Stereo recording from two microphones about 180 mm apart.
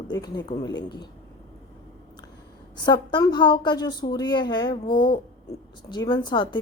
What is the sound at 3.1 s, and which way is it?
Speech, 25° left (ahead or behind).